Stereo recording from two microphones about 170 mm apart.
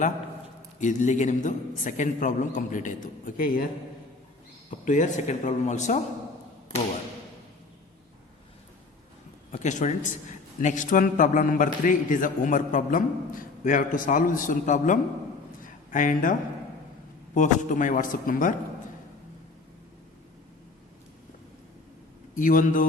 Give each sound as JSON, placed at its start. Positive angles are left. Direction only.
{"t": 0.8, "sound": "a man's voice", "side_deg": 45}
{"t": 4.9, "sound": "a man's voice", "side_deg": 45}
{"t": 9.5, "sound": "a man's voice", "side_deg": 45}
{"t": 15.6, "sound": "a sound", "side_deg": 50}
{"t": 17.3, "sound": "a man's voice", "side_deg": 50}
{"t": 22.4, "sound": "a man's voice", "side_deg": 50}